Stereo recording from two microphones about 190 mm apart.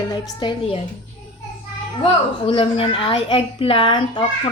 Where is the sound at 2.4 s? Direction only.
30° left (ahead or behind).